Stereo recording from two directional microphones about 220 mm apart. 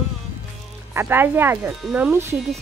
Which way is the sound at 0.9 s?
10° right (ahead or behind).